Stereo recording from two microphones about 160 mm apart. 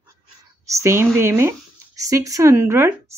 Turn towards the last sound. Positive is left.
turn(degrees=-15)  # may be behind; listen again after turning